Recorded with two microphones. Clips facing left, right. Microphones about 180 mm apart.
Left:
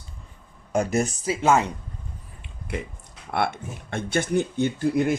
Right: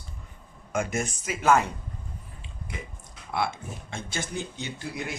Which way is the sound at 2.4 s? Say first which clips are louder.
Left 9 dB; 60° left (ahead or behind).